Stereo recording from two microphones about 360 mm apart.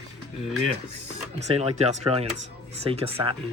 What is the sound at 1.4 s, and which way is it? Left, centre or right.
Speech, centre.